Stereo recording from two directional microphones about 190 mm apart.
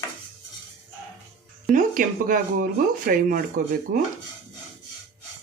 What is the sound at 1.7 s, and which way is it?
Speech, 45° right (ahead or behind).